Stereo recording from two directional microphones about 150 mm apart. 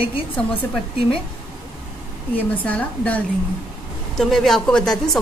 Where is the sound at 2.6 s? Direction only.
10° left (ahead or behind).